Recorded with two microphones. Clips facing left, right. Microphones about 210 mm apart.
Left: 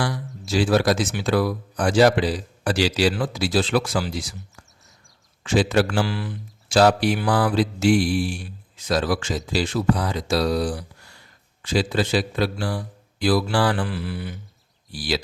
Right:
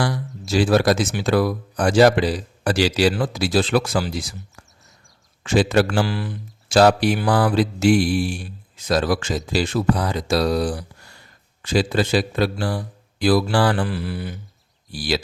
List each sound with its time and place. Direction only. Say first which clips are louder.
0.0 s speech: right 3 dB; 45° right (ahead or behind)
5.4 s speech: right 2 dB; 45° right (ahead or behind)